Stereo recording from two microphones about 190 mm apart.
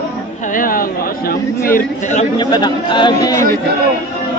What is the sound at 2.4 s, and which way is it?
Speech, 20° left (ahead or behind).